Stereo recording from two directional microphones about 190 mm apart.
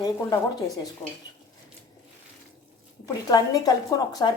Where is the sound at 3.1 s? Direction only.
20° left (ahead or behind).